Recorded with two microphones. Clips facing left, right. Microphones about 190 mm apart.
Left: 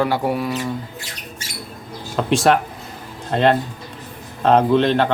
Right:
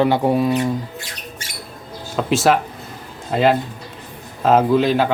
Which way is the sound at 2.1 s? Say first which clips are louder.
Even; centre (ahead or behind).